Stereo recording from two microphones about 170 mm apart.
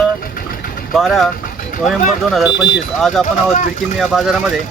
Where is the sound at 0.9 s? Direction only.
Centre (ahead or behind).